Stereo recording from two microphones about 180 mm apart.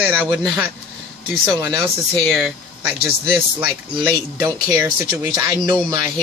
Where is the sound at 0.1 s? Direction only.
10° right (ahead or behind).